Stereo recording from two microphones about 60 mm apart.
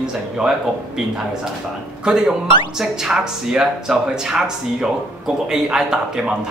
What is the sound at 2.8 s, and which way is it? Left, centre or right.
Speech, centre.